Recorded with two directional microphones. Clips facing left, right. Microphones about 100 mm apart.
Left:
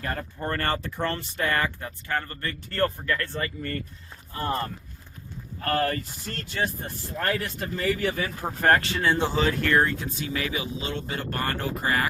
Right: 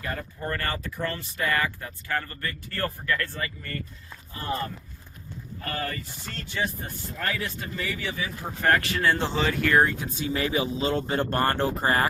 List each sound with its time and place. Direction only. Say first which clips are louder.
0.3 s speech: left 4 dB; 30° left (ahead or behind)
5.6 s speech: left 7 dB; 60° left (ahead or behind)
7.2 s speech: left 3 dB; 40° left (ahead or behind)
8.8 s speech: even; 25° left (ahead or behind)
9.2 s speech: left 2 dB; centre (ahead or behind)
9.6 s speech: right 1 dB; 15° right (ahead or behind)
10.3 s speech: right 5 dB; 30° right (ahead or behind)